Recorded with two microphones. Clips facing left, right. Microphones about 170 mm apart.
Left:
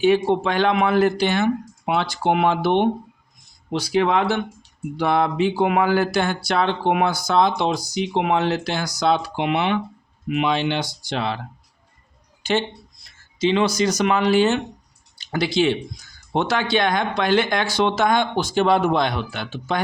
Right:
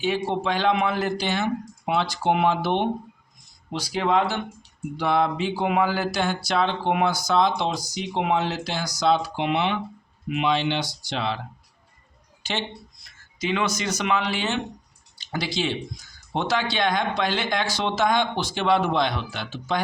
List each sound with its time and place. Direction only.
0.0 s speech: 60° left (ahead or behind)
12.4 s a sound: 50° left (ahead or behind)
13.1 s speech: 30° left (ahead or behind)
15.2 s speech: 55° left (ahead or behind)